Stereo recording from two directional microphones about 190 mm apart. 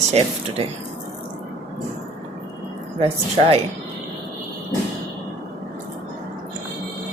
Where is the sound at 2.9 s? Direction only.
30° right (ahead or behind).